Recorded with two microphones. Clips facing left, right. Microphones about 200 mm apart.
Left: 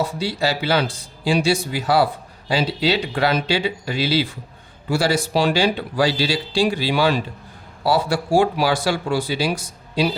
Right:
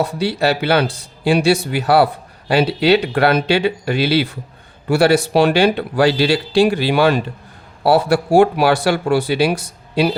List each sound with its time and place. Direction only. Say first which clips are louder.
0.0 s speech: right 4 dB; 65° right (ahead or behind)